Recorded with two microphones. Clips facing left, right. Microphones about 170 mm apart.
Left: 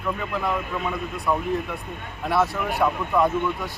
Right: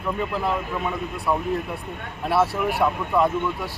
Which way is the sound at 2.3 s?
5° right (ahead or behind).